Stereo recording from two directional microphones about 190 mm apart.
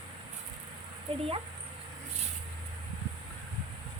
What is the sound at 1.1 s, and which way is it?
Speech, 30° right (ahead or behind).